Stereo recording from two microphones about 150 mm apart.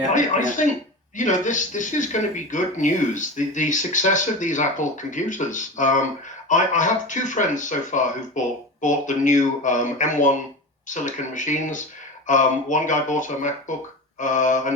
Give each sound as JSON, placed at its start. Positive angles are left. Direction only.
{"t": 0.1, "sound": "speech", "side_deg": 55}